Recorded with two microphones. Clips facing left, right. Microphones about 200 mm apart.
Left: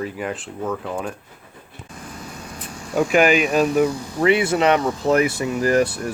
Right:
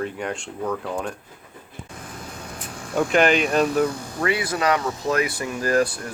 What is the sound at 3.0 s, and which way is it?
Speech, 10° left (ahead or behind).